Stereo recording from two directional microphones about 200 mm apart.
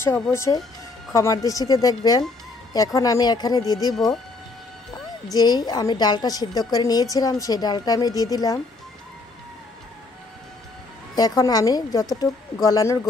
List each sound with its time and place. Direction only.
0.0 s a woman's voice: 15° left (ahead or behind)
5.3 s a woman's voice: 20° left (ahead or behind)
11.1 s a woman's voice: 20° left (ahead or behind)